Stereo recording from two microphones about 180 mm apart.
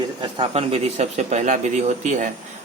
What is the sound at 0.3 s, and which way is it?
A man's voice, 30° right (ahead or behind).